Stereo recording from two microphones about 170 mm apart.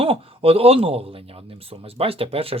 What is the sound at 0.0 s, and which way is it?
Speech, 35° right (ahead or behind).